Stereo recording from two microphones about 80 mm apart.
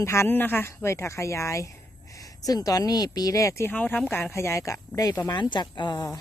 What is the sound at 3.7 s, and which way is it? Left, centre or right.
Speech, left.